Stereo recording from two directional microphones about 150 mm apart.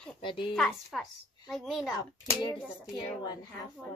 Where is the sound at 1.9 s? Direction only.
25° left (ahead or behind).